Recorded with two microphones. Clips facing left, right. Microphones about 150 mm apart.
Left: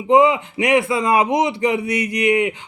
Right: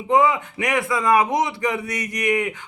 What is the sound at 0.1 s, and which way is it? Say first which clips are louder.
A man's voice: left 4 dB; 20° left (ahead or behind).